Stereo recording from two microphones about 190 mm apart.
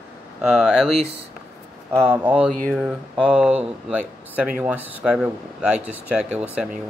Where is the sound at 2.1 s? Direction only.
10° right (ahead or behind).